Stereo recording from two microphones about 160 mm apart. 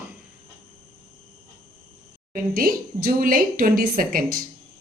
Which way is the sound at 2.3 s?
65° right (ahead or behind).